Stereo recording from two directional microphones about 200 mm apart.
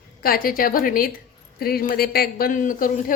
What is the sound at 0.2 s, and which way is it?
A man's voice, 45° left (ahead or behind).